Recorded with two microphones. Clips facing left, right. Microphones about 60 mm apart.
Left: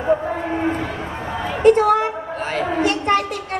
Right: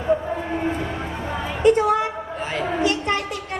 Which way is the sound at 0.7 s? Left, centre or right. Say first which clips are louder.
Left 3 dB; left.